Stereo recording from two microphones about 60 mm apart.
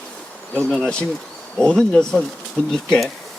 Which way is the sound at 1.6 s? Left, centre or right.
Centre.